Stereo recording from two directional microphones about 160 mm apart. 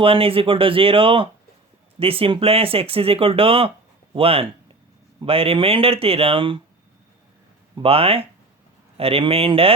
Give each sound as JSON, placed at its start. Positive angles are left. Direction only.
{"t": 0.0, "sound": "speech", "side_deg": -35}
{"t": 7.8, "sound": "speech", "side_deg": -40}